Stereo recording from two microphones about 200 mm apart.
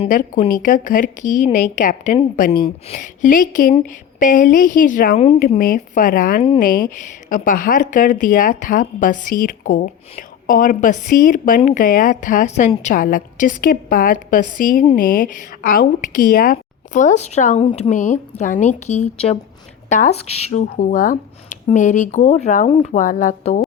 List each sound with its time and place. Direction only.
0.1 s speech: 40° left (ahead or behind)
5.5 s a woman's voice: 45° left (ahead or behind)